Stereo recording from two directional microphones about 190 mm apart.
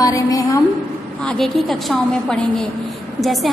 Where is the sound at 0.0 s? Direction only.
15° left (ahead or behind).